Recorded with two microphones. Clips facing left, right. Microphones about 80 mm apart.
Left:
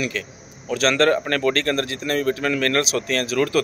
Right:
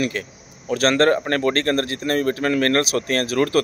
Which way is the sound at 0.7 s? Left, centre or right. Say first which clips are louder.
Right 1 dB; right.